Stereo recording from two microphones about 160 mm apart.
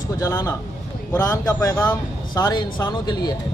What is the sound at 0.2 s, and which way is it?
Speech, 20° left (ahead or behind).